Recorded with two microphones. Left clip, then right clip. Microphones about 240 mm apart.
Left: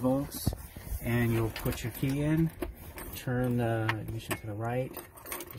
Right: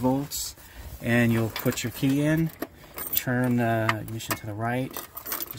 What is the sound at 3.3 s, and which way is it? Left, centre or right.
Speech, right.